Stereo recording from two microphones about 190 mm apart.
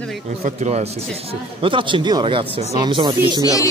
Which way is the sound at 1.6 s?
25° right (ahead or behind).